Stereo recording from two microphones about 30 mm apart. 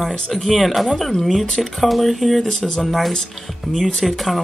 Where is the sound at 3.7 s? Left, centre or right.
Centre.